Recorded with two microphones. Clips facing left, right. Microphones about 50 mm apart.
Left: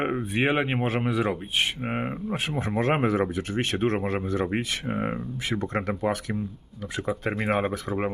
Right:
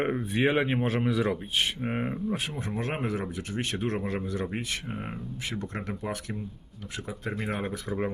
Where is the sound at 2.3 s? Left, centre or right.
Left.